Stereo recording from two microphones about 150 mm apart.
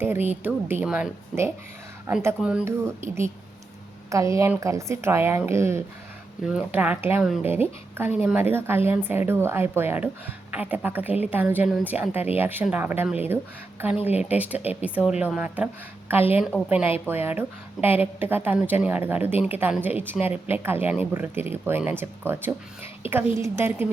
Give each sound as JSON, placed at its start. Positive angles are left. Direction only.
{"t": 0.0, "sound": "speech", "side_deg": -15}
{"t": 2.6, "sound": "a woman's voice", "side_deg": -20}
{"t": 6.4, "sound": "speech", "side_deg": -5}
{"t": 14.1, "sound": "speech", "side_deg": 45}
{"t": 14.3, "sound": "speech", "side_deg": -10}
{"t": 14.6, "sound": "speech", "side_deg": 45}
{"t": 14.8, "sound": "speech", "side_deg": -10}